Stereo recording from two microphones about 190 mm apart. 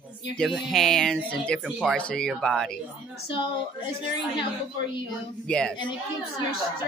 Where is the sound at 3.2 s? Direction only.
25° left (ahead or behind).